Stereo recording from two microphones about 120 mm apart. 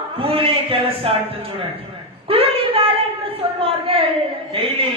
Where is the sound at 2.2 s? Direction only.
55° right (ahead or behind).